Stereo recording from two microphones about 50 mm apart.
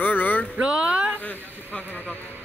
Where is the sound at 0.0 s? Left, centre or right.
Left.